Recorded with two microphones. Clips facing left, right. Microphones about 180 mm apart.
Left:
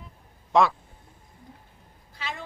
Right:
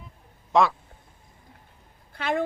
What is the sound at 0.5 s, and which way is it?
Speech, centre (ahead or behind).